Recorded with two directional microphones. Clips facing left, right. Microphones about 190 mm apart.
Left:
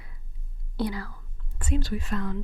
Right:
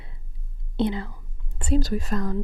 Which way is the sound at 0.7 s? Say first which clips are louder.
Right 5 dB; 25° right (ahead or behind).